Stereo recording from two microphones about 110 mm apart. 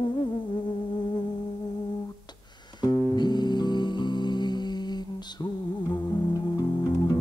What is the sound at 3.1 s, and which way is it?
Music, 40° left (ahead or behind).